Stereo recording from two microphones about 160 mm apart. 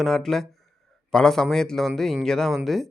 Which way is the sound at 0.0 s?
5° left (ahead or behind).